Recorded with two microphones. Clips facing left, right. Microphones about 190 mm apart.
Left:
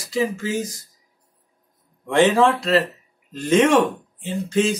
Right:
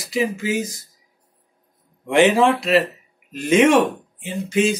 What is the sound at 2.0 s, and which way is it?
Speech, 15° right (ahead or behind).